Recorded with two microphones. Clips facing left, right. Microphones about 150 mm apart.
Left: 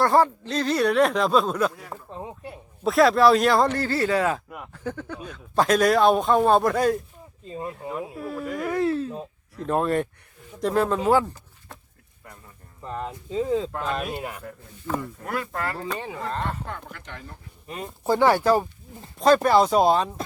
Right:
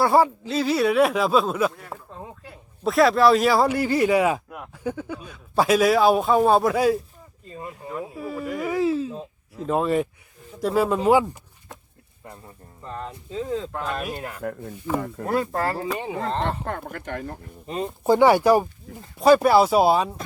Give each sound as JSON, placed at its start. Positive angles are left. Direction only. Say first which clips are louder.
{"t": 0.0, "sound": "a man's voice", "louder": "right 1 dB", "side_deg": -10}
{"t": 2.1, "sound": "speech", "louder": "left 4 dB", "side_deg": 20}
{"t": 2.8, "sound": "a man's voice", "louder": "even", "side_deg": 0}
{"t": 4.4, "sound": "a sound", "louder": "right 1 dB", "side_deg": 0}
{"t": 4.8, "sound": "a man's voice", "louder": "right 3 dB", "side_deg": -10}
{"t": 7.4, "sound": "speech", "louder": "left 4 dB", "side_deg": 20}
{"t": 7.7, "sound": "a man's voice", "louder": "right 3 dB", "side_deg": 0}
{"t": 12.8, "sound": "speech", "louder": "left 2 dB", "side_deg": 10}
{"t": 14.9, "sound": "speech", "louder": "right 3 dB", "side_deg": -5}
{"t": 15.2, "sound": "speech", "louder": "right 6 dB", "side_deg": -30}
{"t": 16.0, "sound": "speech", "louder": "right 4 dB", "side_deg": -20}
{"t": 16.6, "sound": "speech", "louder": "right 7 dB", "side_deg": -50}
{"t": 17.7, "sound": "speech", "louder": "right 7 dB", "side_deg": -30}
{"t": 18.0, "sound": "speech", "louder": "right 3 dB", "side_deg": -15}